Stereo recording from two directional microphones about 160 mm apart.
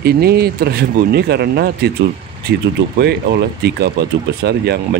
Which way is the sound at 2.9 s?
85° right.